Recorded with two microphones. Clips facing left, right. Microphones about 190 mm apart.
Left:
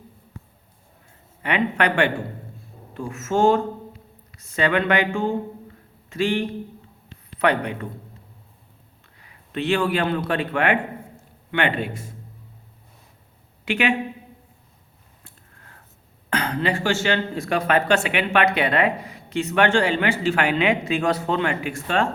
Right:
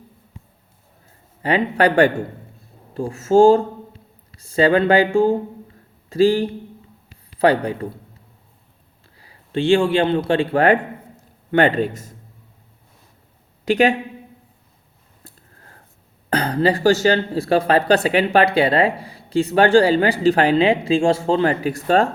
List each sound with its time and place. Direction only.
1.4 s speech: 35° right (ahead or behind)
9.1 s a man's voice: 30° right (ahead or behind)
13.7 s speech: 40° right (ahead or behind)
15.2 s a sound: 35° right (ahead or behind)
16.3 s speech: 35° right (ahead or behind)